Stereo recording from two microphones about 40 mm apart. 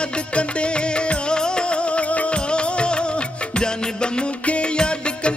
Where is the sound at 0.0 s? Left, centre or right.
Left.